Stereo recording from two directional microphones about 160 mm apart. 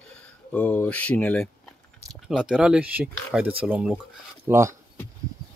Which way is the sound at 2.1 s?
Centre (ahead or behind).